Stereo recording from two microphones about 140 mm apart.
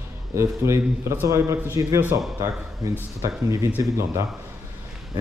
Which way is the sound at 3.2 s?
20° right (ahead or behind).